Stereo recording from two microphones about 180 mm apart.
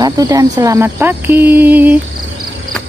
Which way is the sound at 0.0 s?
20° right (ahead or behind).